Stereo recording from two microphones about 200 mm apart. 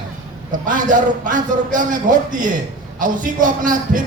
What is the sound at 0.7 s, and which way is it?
A man's voice, 40° right (ahead or behind).